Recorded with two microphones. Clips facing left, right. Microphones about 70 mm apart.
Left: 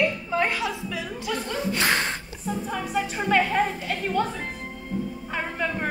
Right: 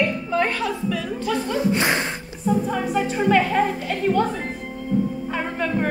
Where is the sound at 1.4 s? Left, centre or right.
Centre.